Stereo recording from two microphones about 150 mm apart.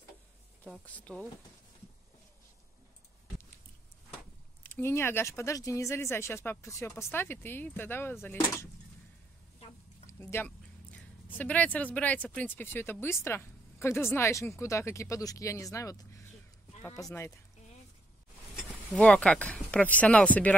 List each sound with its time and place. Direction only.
0.8 s speech: 10° left (ahead or behind)
4.6 s speech: 15° left (ahead or behind)
10.0 s speech: 15° left (ahead or behind)
18.9 s speech: 10° left (ahead or behind)